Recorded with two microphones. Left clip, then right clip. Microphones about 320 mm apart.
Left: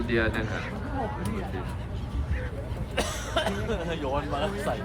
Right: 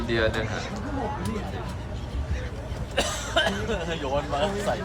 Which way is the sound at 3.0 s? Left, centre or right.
Right.